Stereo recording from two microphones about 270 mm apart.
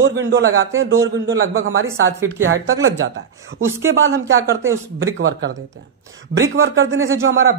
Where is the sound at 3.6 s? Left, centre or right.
Centre.